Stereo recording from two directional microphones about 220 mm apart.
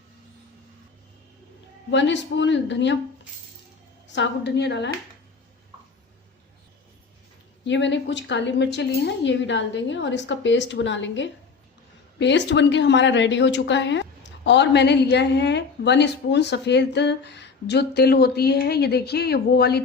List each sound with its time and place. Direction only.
1.9 s a woman's voice: 55° left (ahead or behind)
4.0 s speech: 55° left (ahead or behind)
7.6 s a woman's voice: 55° left (ahead or behind)